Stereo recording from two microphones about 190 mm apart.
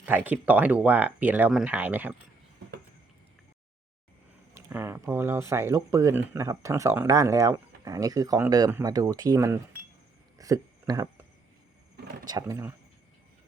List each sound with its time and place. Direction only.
0.0 s speech: 10° right (ahead or behind)
4.5 s speech: 15° right (ahead or behind)
10.3 s a sound: 20° right (ahead or behind)
12.2 s speech: 20° right (ahead or behind)